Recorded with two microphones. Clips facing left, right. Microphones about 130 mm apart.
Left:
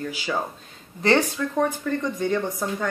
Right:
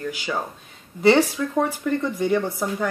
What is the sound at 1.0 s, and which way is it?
Speech, 10° right (ahead or behind).